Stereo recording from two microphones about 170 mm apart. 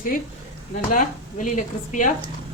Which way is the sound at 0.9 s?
50° left (ahead or behind).